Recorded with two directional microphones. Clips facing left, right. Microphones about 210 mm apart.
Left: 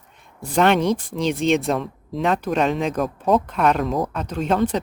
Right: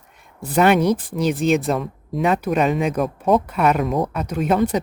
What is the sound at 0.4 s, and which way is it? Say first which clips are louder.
Speech: right 2 dB; 5° right (ahead or behind).